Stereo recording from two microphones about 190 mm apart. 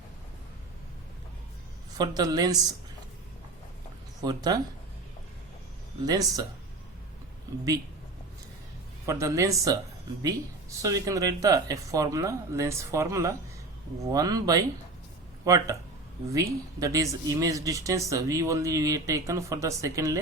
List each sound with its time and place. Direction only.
2.0 s a woman's voice: 20° right (ahead or behind)
4.2 s a woman's voice: 20° right (ahead or behind)
6.1 s a woman's voice: 20° right (ahead or behind)
9.0 s a woman's voice: 15° right (ahead or behind)